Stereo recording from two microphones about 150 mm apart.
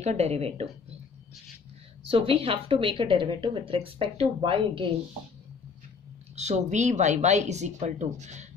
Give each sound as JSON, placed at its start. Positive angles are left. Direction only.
{"t": 0.0, "sound": "speech", "side_deg": -45}
{"t": 2.0, "sound": "a woman's voice", "side_deg": -40}
{"t": 6.3, "sound": "speech", "side_deg": -50}